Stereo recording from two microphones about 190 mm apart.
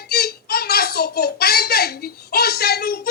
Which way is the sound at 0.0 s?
55° left (ahead or behind).